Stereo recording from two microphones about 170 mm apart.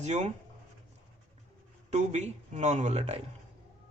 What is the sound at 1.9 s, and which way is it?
Speech, 45° right (ahead or behind).